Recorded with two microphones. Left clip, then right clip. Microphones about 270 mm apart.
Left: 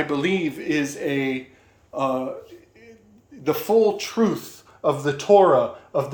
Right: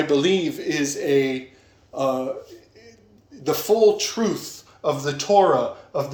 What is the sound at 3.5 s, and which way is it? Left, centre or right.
Speech, centre.